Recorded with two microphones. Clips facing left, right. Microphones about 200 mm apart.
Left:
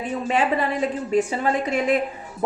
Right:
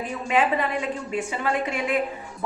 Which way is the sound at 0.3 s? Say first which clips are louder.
Even; 35° left (ahead or behind).